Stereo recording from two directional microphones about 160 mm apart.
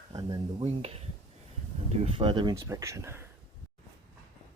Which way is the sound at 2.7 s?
20° right (ahead or behind).